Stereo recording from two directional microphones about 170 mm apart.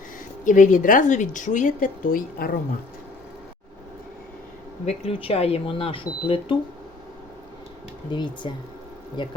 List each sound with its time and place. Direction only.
0.4 s a woman's voice: 50° left (ahead or behind)
4.9 s speech: 35° left (ahead or behind)
8.1 s speech: 25° left (ahead or behind)